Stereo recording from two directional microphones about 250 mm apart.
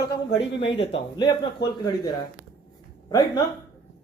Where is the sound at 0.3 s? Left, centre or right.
Left.